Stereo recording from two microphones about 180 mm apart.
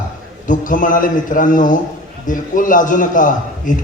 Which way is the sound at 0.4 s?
45° left (ahead or behind).